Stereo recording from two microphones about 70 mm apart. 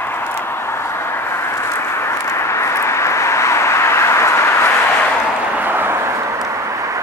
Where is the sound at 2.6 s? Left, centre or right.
Left.